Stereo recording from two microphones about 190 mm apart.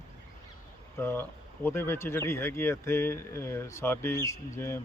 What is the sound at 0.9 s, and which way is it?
Speech, 10° left (ahead or behind).